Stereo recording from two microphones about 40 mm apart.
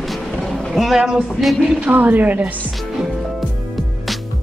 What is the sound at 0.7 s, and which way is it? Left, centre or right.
Speech, centre.